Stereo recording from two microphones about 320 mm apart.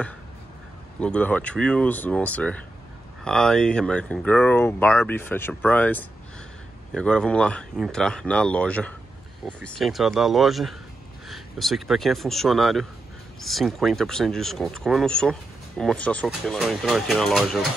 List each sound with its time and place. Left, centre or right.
1.0 s speech: centre